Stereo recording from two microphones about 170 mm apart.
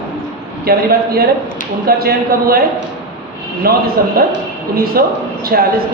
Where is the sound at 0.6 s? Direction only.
65° right (ahead or behind).